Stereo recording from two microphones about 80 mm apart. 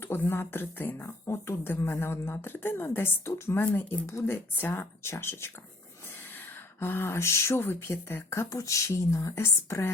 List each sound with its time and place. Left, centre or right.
0.0 s a woman's voice: left
4.0 s speech: left
6.7 s speech: left
8.4 s speech: left
9.4 s speech: left